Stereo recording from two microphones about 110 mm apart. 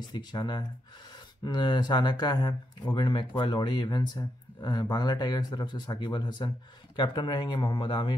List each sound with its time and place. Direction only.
0.1 s speech: 40° left (ahead or behind)